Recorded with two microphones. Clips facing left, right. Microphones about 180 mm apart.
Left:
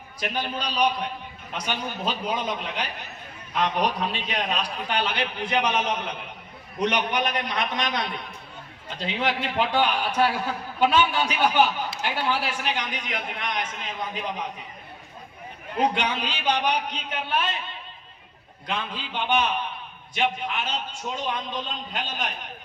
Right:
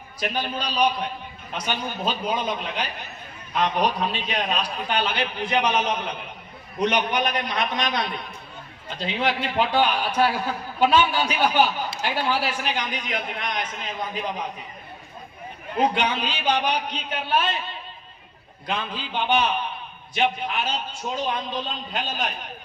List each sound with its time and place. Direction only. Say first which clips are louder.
0.2 s a man's voice: right 2 dB; 35° right (ahead or behind)
1.6 s a man's voice: right 2 dB; 30° right (ahead or behind)
15.9 s a man's voice: right 2 dB; 30° right (ahead or behind)
18.7 s a man's voice: right 2 dB; 35° right (ahead or behind)